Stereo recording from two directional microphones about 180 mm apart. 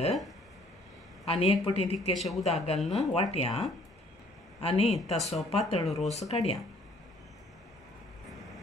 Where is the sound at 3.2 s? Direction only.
35° left (ahead or behind).